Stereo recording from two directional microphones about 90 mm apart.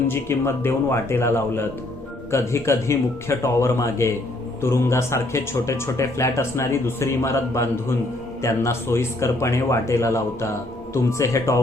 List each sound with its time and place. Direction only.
0.1 s a man's voice: 25° left (ahead or behind)